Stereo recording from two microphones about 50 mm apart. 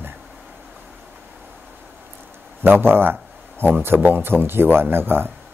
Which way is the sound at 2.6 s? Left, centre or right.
Right.